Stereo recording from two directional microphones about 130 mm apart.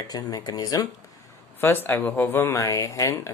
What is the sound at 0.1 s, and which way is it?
Speech, 30° left (ahead or behind).